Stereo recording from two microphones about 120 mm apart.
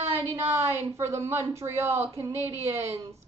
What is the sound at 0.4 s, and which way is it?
A woman's voice, 20° right (ahead or behind).